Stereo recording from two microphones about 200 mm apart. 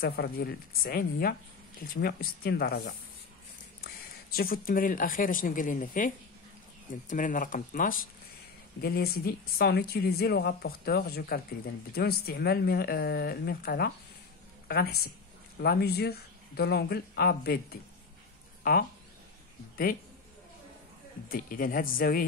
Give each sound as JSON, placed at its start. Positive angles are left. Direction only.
{"t": 0.0, "sound": "a woman's voice", "side_deg": 50}
{"t": 21.3, "sound": "a woman's voice", "side_deg": 45}